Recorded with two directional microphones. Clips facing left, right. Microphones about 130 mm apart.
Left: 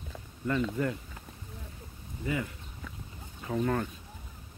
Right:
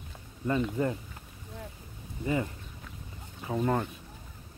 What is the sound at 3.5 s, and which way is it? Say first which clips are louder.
Speech: right 1 dB; 20° right (ahead or behind).